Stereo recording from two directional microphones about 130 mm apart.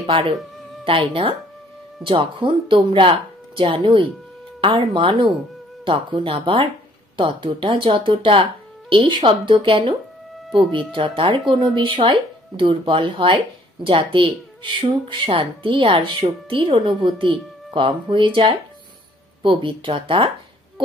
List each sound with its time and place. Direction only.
0.8 s speech: 45° right (ahead or behind)